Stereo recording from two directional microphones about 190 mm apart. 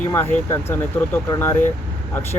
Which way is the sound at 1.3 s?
15° left (ahead or behind).